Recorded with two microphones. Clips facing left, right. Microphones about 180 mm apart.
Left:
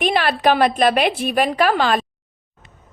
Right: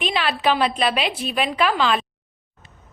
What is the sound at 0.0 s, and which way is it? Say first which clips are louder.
A woman's voice: left 4 dB; 50° left (ahead or behind).